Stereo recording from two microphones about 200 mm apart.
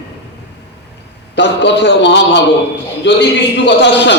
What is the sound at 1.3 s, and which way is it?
A man's voice, 60° left (ahead or behind).